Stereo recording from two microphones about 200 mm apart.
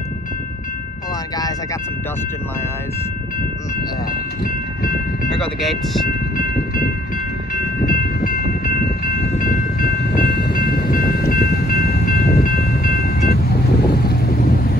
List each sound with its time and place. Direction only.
5.3 s speech: centre (ahead or behind)
6.0 s train: 45° left (ahead or behind)
13.8 s boat: 50° left (ahead or behind)